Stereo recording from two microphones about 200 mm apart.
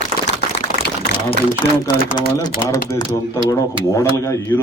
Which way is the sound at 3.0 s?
15° left (ahead or behind).